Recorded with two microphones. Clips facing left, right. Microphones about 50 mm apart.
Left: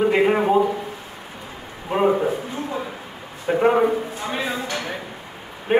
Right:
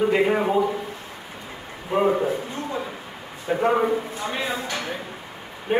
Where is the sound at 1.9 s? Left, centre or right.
Centre.